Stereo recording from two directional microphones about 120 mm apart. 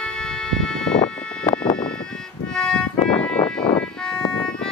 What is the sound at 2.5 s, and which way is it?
Music, 5° left (ahead or behind).